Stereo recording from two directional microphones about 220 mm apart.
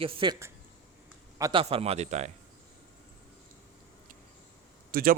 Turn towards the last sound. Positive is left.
turn(degrees=-40)  # may be behind; listen again after turning